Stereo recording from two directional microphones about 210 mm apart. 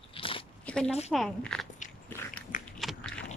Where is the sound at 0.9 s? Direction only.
30° left (ahead or behind).